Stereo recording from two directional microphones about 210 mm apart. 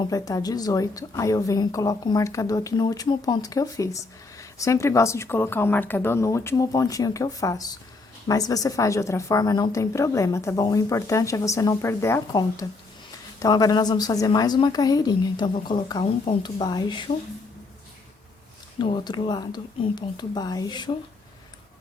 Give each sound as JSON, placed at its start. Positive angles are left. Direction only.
{"t": 0.0, "sound": "a woman's voice", "side_deg": 15}
{"t": 18.8, "sound": "a woman's voice", "side_deg": 20}